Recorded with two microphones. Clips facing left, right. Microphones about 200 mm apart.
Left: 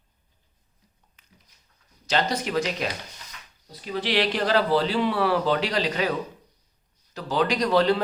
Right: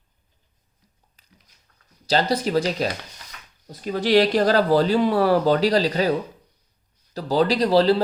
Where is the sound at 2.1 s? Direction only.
35° right (ahead or behind).